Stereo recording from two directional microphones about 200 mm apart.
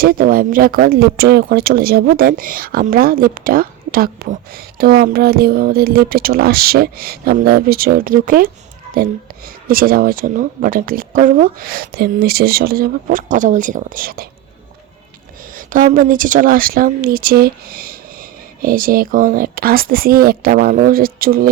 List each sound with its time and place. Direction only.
0.0 s speech: 45° right (ahead or behind)
9.6 s speech: 45° right (ahead or behind)
15.5 s speech: 40° right (ahead or behind)